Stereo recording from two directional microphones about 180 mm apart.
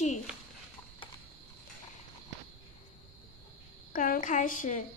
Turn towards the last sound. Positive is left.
turn(degrees=50)  # may be behind; listen again after turning